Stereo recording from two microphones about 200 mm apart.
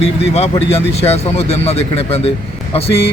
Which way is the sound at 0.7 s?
30° left (ahead or behind).